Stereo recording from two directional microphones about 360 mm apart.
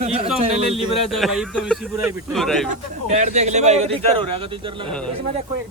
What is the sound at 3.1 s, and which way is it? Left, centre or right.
A man's voice, centre.